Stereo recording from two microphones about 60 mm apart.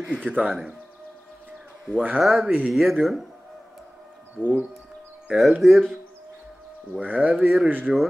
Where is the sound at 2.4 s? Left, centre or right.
Right.